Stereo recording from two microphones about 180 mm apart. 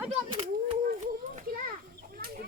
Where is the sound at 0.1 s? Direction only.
30° right (ahead or behind).